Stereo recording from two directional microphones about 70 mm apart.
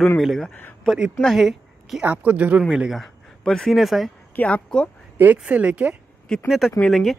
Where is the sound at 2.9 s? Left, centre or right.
Centre.